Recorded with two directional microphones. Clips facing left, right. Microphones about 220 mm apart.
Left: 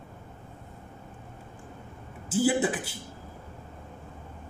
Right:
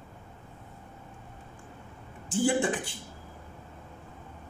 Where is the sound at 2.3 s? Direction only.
5° left (ahead or behind).